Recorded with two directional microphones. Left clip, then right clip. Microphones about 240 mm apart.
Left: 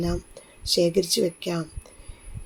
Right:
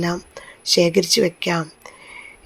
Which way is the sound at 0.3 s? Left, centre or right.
Centre.